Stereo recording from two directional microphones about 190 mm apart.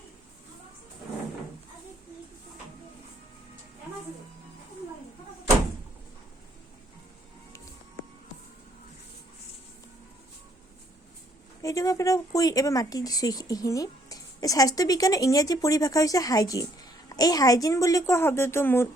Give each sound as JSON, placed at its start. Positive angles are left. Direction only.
{"t": 11.6, "sound": "a woman's voice", "side_deg": 15}